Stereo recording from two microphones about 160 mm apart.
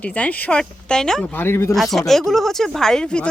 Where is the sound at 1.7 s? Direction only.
Centre (ahead or behind).